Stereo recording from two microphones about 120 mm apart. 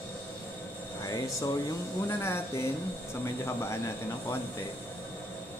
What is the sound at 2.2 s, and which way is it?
Speech, 20° left (ahead or behind).